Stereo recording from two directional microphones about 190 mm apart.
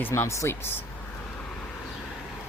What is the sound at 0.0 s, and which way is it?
Speech, 15° left (ahead or behind).